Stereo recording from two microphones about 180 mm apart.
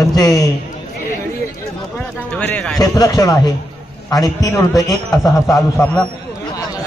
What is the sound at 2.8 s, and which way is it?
A man's voice, 20° left (ahead or behind).